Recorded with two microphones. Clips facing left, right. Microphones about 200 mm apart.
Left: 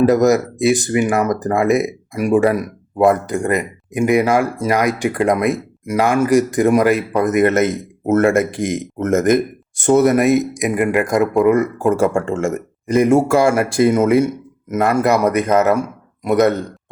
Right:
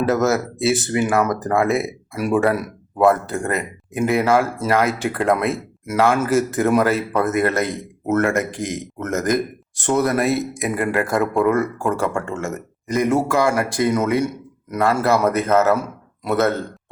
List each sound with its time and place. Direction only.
0.3 s speech: 15° left (ahead or behind)
11.2 s speech: centre (ahead or behind)
11.5 s speech: 15° left (ahead or behind)